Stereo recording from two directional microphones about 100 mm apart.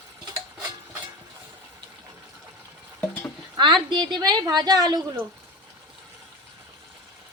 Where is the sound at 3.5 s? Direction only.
50° right (ahead or behind).